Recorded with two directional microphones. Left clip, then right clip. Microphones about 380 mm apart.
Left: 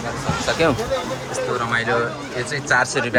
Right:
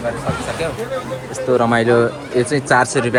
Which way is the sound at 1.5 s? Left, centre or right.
Centre.